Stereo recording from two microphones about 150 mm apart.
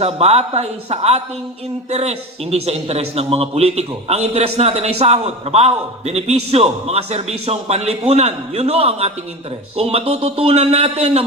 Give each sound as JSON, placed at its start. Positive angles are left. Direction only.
{"t": 0.0, "sound": "a man's voice", "side_deg": -45}